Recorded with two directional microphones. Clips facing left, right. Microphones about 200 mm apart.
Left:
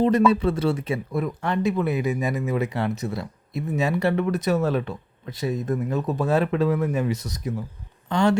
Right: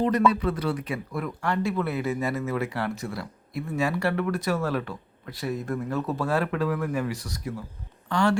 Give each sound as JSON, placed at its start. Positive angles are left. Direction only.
{"t": 0.3, "sound": "speech", "side_deg": 25}